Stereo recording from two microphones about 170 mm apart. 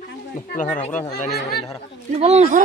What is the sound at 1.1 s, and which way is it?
Speech, 65° left (ahead or behind).